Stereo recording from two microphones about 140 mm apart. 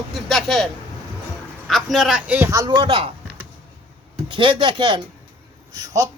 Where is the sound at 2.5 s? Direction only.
30° right (ahead or behind).